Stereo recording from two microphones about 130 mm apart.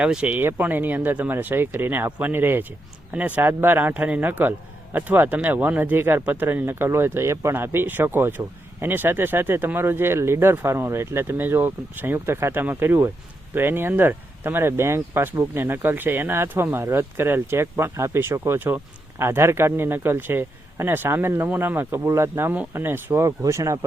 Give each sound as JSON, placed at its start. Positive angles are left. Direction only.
{"t": 0.0, "sound": "speech", "side_deg": -10}